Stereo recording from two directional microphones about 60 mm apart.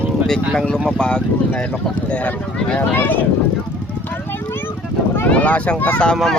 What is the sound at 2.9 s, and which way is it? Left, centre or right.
Speech, left.